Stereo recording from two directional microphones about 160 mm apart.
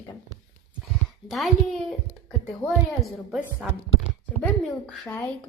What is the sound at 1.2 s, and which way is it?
Speech, centre (ahead or behind).